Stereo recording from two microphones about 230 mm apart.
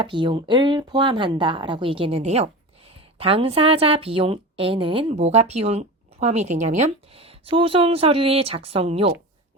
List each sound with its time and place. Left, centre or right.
0.0 s a woman's voice: right